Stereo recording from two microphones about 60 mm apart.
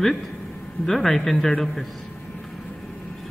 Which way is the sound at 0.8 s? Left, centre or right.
Centre.